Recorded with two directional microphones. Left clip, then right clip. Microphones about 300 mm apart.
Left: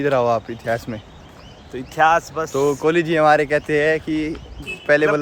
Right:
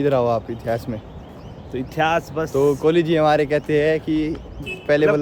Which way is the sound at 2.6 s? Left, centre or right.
Centre.